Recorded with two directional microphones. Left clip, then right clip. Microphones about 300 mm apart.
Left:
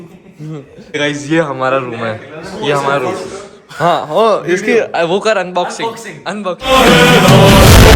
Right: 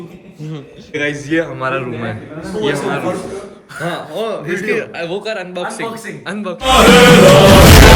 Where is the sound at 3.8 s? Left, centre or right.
Centre.